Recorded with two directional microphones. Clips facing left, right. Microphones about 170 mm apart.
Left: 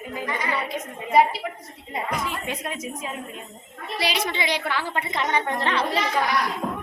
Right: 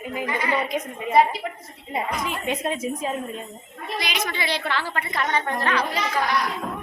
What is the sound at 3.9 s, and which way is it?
A woman's voice, 30° left (ahead or behind).